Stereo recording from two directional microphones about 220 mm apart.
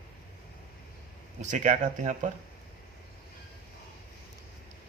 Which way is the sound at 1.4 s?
35° right (ahead or behind).